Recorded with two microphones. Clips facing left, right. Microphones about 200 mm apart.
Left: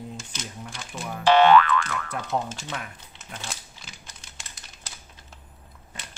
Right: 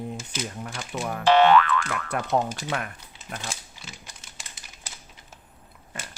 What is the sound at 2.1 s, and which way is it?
Speech, 65° right (ahead or behind).